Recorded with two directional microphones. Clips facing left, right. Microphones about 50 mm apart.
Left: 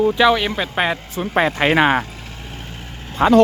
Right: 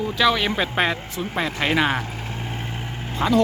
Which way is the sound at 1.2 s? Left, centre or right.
Left.